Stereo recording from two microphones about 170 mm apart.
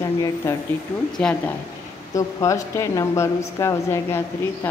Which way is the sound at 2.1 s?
20° left (ahead or behind).